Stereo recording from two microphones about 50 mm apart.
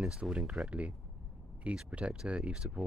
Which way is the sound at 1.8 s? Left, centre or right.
Right.